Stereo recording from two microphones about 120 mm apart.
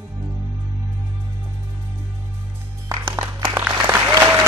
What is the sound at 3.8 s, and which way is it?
Applause, 15° right (ahead or behind).